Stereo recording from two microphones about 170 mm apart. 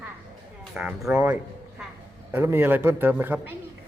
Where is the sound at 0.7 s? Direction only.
5° right (ahead or behind).